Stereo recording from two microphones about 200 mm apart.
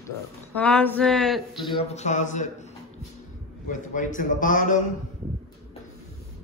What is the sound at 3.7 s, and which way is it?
A man's voice, 40° left (ahead or behind).